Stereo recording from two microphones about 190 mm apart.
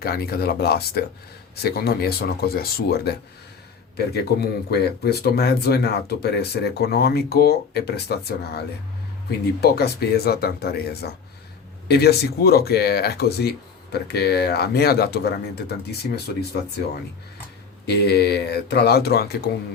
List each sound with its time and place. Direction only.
0.0 s speech: 55° left (ahead or behind)
17.8 s speech: 60° left (ahead or behind)